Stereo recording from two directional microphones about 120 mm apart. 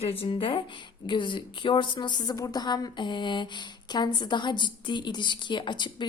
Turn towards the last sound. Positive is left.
turn(degrees=40)  # may be behind; listen again after turning